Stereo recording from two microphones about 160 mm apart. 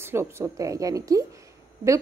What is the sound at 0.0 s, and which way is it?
A woman's voice, 15° right (ahead or behind).